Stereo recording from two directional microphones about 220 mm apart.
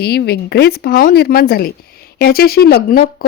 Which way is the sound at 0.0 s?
45° left (ahead or behind).